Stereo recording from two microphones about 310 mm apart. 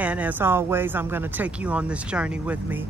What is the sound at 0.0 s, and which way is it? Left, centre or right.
Speech, centre.